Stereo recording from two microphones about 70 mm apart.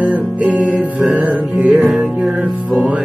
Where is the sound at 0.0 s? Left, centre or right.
Right.